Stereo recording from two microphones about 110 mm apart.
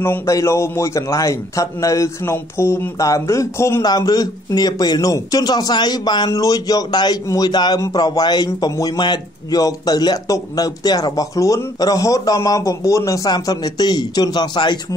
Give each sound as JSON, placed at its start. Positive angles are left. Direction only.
{"t": 0.0, "sound": "a man's voice", "side_deg": 25}
{"t": 3.8, "sound": "speech", "side_deg": 35}